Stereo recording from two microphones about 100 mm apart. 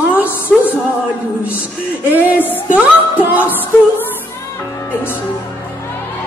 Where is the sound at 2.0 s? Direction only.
15° right (ahead or behind).